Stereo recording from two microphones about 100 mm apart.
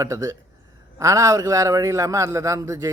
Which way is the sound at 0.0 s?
35° right (ahead or behind).